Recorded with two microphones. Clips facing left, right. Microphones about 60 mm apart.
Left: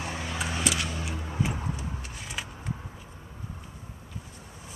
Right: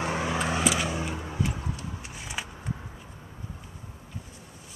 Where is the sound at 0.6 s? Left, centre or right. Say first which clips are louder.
Right 4 dB; centre.